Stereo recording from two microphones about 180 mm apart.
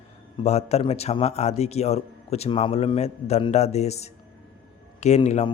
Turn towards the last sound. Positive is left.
turn(degrees=40)  # may be behind; listen again after turning